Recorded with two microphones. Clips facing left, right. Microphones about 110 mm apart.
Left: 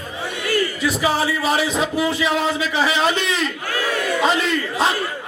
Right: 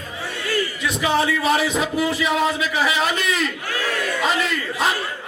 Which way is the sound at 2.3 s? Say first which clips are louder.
Left 1 dB; 30° left (ahead or behind).